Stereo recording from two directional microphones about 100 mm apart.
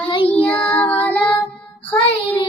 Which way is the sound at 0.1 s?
65° left (ahead or behind).